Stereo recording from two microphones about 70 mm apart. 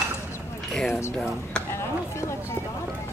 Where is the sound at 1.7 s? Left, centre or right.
Left.